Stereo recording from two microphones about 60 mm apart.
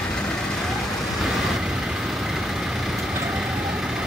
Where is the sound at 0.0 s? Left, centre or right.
Centre.